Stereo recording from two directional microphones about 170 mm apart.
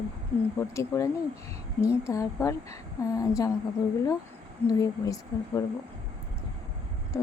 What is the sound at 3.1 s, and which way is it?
Speech, 20° left (ahead or behind).